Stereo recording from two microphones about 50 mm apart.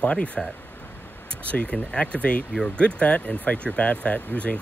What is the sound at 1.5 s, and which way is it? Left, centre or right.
Speech, left.